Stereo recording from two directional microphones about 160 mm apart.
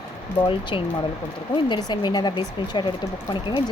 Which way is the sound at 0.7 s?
35° left (ahead or behind).